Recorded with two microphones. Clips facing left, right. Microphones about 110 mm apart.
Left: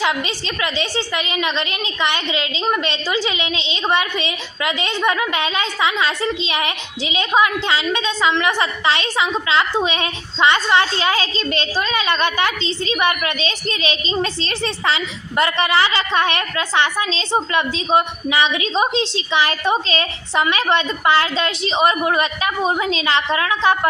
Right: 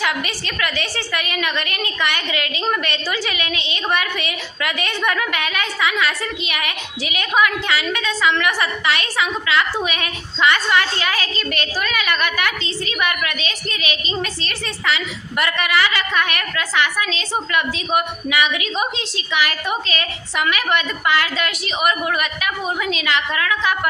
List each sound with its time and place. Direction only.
0.0 s a woman's voice: 20° left (ahead or behind)